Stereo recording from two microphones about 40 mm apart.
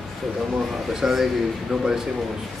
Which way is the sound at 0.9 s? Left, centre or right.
Centre.